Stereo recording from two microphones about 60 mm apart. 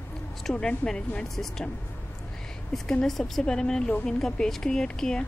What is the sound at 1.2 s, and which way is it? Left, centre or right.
Speech, centre.